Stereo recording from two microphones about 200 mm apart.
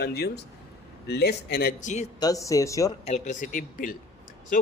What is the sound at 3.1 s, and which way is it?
A man's voice, 35° left (ahead or behind).